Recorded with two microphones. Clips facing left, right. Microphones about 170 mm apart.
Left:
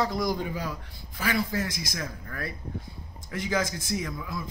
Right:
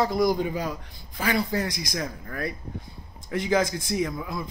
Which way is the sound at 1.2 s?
35° right (ahead or behind).